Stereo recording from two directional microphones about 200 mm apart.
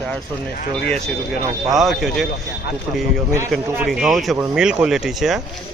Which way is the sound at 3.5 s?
5° right (ahead or behind).